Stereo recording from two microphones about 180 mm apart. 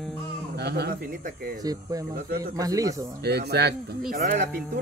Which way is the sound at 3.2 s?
65° right (ahead or behind).